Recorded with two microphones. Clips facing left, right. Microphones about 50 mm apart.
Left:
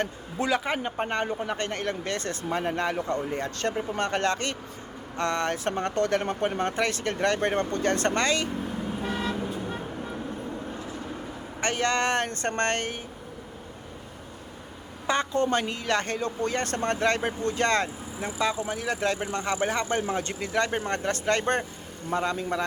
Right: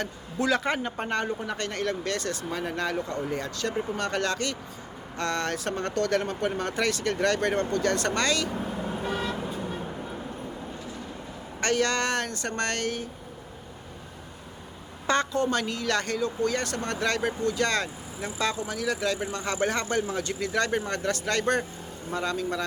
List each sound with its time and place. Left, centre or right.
0.0 s speech: left
0.5 s speech: centre
0.8 s speech: centre
11.6 s speech: left
15.0 s a woman's voice: centre
15.3 s speech: left
18.3 s speech: centre
18.6 s speech: left
19.5 s speech: centre
20.1 s speech: left
20.4 s speech: left